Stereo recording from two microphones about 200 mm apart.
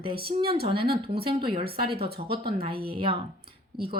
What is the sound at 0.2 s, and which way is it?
Speech, 50° right (ahead or behind).